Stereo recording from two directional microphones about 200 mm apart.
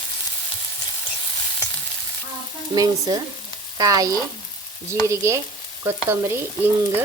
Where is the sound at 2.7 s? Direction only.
20° right (ahead or behind).